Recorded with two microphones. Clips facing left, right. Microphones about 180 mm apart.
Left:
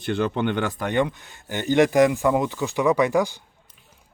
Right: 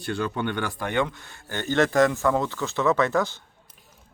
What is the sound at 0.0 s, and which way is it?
Speech, 20° left (ahead or behind).